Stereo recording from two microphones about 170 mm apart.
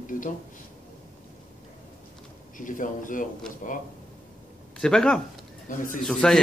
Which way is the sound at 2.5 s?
50° left (ahead or behind).